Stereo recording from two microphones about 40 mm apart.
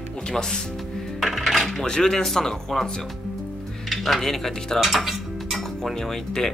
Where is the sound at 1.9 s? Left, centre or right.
Centre.